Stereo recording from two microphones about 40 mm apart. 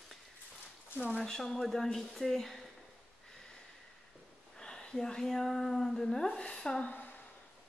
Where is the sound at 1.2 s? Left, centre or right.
Centre.